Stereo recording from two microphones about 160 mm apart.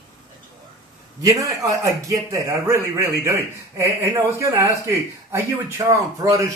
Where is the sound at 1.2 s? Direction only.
20° right (ahead or behind).